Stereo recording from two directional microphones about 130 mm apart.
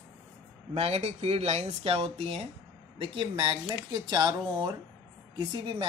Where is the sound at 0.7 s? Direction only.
50° right (ahead or behind).